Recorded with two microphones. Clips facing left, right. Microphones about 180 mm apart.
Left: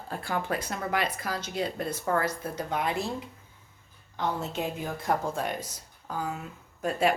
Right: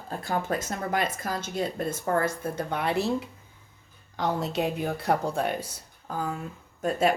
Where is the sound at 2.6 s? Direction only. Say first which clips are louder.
Right 2 dB; 60° right (ahead or behind).